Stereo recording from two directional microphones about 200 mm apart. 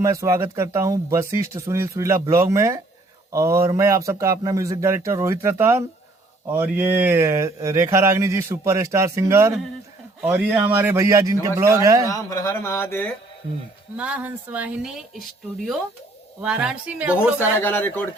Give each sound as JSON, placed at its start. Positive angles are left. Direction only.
{"t": 0.0, "sound": "speech", "side_deg": -15}
{"t": 12.0, "sound": "speech", "side_deg": 15}
{"t": 13.9, "sound": "speech", "side_deg": -5}
{"t": 16.4, "sound": "a woman's voice", "side_deg": -5}
{"t": 17.6, "sound": "speech", "side_deg": 10}